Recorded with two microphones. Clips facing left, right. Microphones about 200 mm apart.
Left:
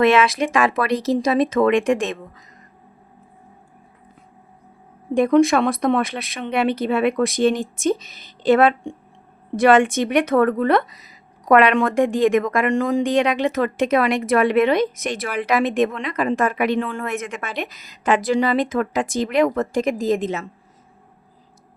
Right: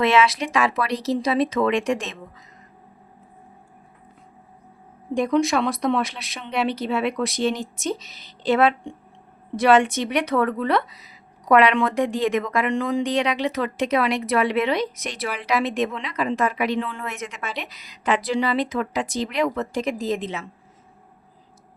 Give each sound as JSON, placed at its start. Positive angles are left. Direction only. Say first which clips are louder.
{"t": 0.0, "sound": "speech", "louder": "left 3 dB", "side_deg": 50}
{"t": 5.1, "sound": "speech", "louder": "left 5 dB", "side_deg": 55}